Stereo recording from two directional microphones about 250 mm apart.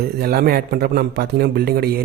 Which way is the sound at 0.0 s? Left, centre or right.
Right.